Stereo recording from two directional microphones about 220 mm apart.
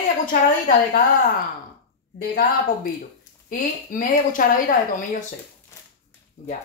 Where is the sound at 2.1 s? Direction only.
40° left (ahead or behind).